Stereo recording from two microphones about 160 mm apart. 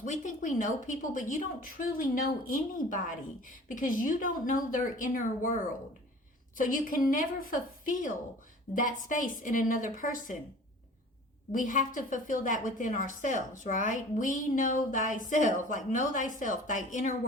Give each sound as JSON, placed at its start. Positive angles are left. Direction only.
{"t": 0.0, "sound": "a woman's voice", "side_deg": 50}
{"t": 6.6, "sound": "a woman's voice", "side_deg": 60}
{"t": 11.5, "sound": "a woman's voice", "side_deg": 55}